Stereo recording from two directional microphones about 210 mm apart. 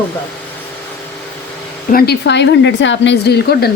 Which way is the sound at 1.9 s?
50° left (ahead or behind).